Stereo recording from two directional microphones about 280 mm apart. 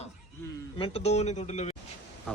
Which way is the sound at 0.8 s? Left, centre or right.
Left.